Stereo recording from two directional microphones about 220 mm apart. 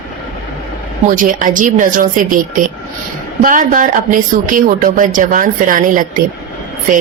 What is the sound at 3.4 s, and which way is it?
Speech, 35° right (ahead or behind).